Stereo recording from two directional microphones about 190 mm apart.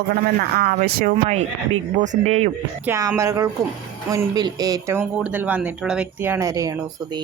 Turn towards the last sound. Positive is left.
turn(degrees=-15)  # may be behind; listen again after turning